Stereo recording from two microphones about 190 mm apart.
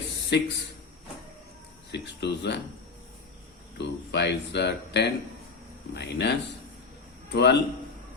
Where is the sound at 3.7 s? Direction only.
65° left (ahead or behind).